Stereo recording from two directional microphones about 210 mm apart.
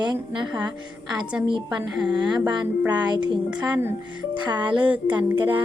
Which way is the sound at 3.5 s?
10° right (ahead or behind).